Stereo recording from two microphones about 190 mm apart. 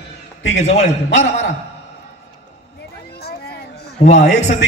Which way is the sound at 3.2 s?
55° left (ahead or behind).